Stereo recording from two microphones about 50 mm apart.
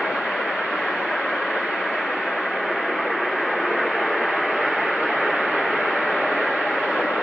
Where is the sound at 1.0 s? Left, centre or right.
Centre.